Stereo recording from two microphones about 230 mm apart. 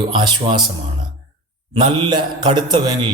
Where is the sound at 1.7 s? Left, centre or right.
Right.